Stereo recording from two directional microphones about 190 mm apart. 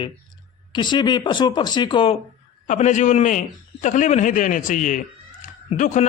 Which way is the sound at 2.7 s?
40° left (ahead or behind).